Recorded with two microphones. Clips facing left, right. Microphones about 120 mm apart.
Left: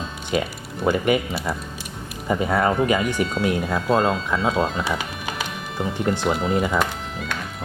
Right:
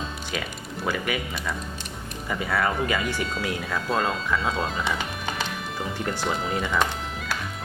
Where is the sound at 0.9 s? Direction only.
25° left (ahead or behind).